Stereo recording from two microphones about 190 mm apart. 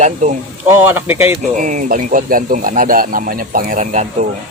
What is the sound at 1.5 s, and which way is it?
Speech, 40° right (ahead or behind).